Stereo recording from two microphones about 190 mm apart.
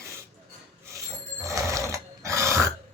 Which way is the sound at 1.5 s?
15° right (ahead or behind).